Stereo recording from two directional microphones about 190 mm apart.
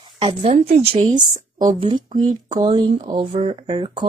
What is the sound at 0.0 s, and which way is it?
Speech, 30° right (ahead or behind).